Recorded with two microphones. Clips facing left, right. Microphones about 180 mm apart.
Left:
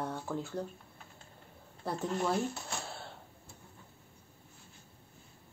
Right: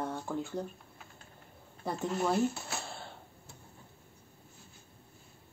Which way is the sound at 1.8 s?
5° right (ahead or behind).